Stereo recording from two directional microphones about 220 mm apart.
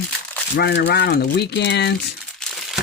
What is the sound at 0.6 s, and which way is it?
Speech, 45° left (ahead or behind).